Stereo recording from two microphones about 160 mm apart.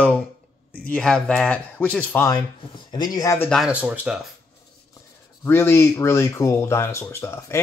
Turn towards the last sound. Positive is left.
turn(degrees=15)  # may be behind; listen again after turning